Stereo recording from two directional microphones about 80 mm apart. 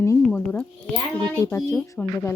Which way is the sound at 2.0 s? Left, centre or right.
Centre.